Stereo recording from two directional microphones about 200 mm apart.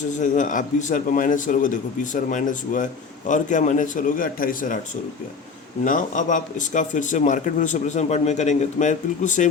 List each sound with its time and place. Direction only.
0.1 s a man's voice: 40° left (ahead or behind)
5.8 s a man's voice: 40° left (ahead or behind)